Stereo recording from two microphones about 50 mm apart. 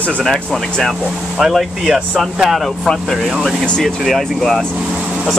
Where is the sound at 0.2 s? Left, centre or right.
Centre.